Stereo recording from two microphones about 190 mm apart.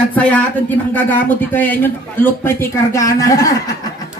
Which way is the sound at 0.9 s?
10° left (ahead or behind).